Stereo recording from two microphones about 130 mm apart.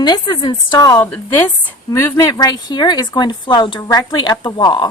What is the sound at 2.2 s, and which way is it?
A woman's voice, 30° left (ahead or behind).